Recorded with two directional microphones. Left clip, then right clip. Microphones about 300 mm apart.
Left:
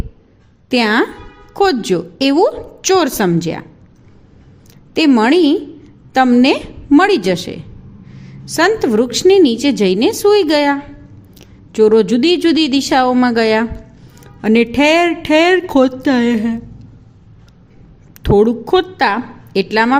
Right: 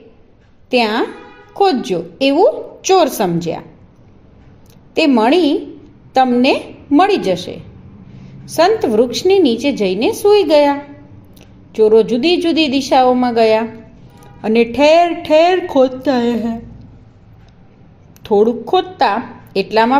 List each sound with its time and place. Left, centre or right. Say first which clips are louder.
0.7 s a woman's voice: left 1 dB; left
4.9 s a woman's voice: left 1 dB; left
18.2 s a woman's voice: left 1 dB; left